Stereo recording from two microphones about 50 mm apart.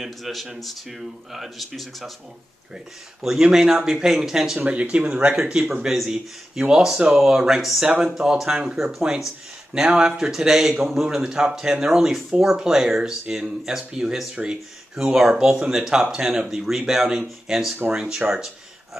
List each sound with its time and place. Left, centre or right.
0.0 s speech: centre
3.2 s speech: centre
4.6 s speech: right